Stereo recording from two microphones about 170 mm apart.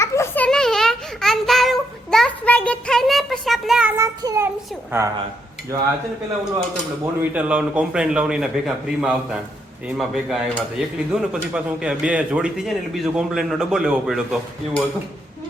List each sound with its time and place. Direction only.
0.0 s child singing: 15° left (ahead or behind); by 3.9 s 5° right (ahead or behind)
3.9 s a sound: 20° right (ahead or behind)
7.0 s a man's voice: 10° right (ahead or behind)